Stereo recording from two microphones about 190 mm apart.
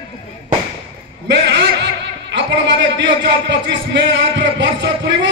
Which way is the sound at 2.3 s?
65° right (ahead or behind).